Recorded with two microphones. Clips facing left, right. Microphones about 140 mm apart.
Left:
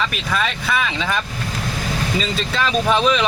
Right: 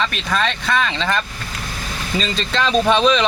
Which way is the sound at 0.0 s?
5° left (ahead or behind).